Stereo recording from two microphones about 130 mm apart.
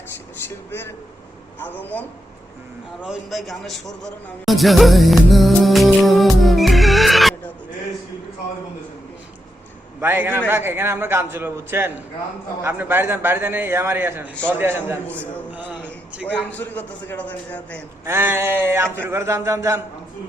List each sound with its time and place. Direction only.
0.4 s a man's voice: 15° left (ahead or behind)
3.0 s a man's voice: 5° right (ahead or behind)
10.0 s a man's voice: 15° right (ahead or behind)
15.0 s a man's voice: 10° left (ahead or behind)
18.0 s a man's voice: 20° right (ahead or behind)